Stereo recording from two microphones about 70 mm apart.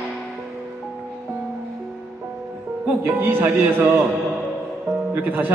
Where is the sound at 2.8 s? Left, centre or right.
Right.